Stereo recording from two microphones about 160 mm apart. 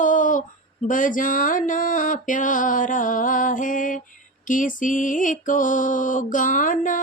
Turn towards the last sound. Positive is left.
turn(degrees=55)  # may be behind; listen again after turning